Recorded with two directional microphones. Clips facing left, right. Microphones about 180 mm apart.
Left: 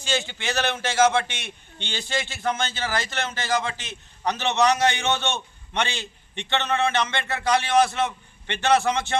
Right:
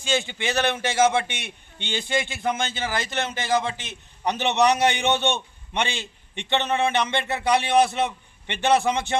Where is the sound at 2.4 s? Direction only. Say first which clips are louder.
Even; 15° right (ahead or behind).